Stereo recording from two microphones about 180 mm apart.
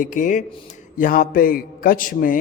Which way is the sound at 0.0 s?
45° left (ahead or behind).